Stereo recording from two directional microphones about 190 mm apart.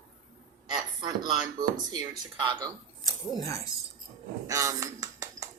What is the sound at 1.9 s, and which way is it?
Speech, 25° right (ahead or behind).